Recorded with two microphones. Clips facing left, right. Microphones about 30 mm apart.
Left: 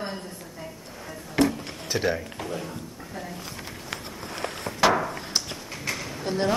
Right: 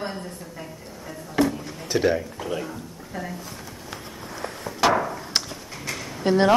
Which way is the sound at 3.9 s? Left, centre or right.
Left.